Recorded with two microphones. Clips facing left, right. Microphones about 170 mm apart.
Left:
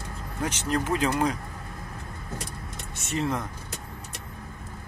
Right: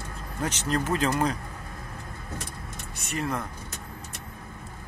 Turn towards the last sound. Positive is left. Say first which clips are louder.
# left 2 dB
turn(degrees=25)  # may be behind; listen again after turning